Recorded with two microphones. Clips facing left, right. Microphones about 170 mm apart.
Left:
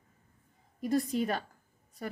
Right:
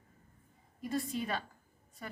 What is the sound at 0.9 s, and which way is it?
Speech, 45° left (ahead or behind).